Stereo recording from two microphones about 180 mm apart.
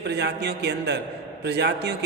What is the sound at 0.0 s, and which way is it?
A man's voice, 70° right (ahead or behind).